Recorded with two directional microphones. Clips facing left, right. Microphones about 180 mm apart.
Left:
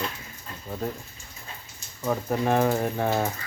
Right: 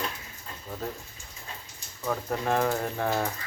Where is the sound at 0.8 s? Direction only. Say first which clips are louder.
Left 4 dB; centre (ahead or behind).